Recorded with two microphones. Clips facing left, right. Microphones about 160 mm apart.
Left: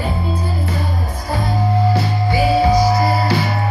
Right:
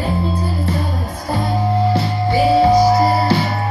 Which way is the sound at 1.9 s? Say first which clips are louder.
Right 1 dB; 25° right (ahead or behind).